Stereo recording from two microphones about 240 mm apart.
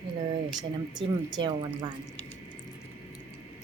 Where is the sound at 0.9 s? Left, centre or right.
Centre.